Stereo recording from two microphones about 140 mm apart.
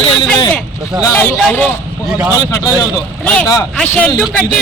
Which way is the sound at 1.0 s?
15° left (ahead or behind).